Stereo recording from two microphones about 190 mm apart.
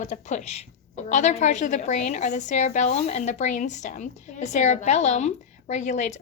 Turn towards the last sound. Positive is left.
turn(degrees=40)  # may be behind; listen again after turning